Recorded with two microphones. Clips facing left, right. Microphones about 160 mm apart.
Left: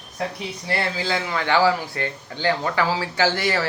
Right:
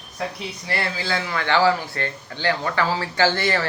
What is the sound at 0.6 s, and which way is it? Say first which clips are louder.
Speech: left 2 dB; 25° left (ahead or behind).